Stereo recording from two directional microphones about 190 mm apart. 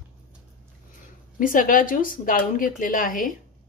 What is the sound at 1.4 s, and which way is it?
Speech, 45° left (ahead or behind).